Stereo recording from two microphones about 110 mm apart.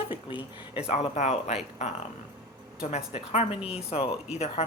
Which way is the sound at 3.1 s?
65° left (ahead or behind).